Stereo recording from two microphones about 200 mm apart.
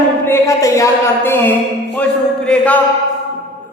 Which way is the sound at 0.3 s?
15° left (ahead or behind).